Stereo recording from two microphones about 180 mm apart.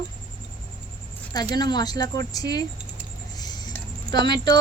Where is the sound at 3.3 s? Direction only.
20° left (ahead or behind).